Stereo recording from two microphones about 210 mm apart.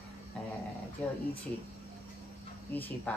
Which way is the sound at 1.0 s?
5° left (ahead or behind).